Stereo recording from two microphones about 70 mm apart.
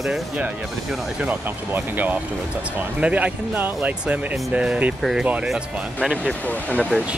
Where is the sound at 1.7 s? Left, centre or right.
Right.